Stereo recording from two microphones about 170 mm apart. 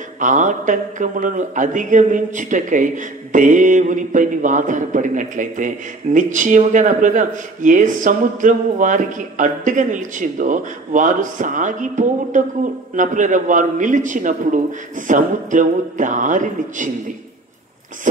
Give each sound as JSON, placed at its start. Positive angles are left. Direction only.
{"t": 0.2, "sound": "speech", "side_deg": -50}